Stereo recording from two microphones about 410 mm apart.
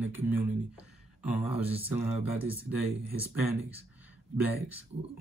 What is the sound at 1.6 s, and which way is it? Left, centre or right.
Mantra, left.